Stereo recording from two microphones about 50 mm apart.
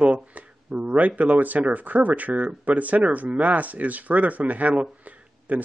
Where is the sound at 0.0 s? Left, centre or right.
Right.